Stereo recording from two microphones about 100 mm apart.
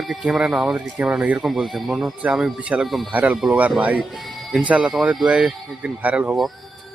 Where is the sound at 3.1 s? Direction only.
15° right (ahead or behind).